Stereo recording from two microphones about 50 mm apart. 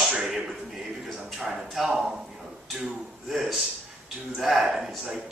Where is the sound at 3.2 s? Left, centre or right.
Centre.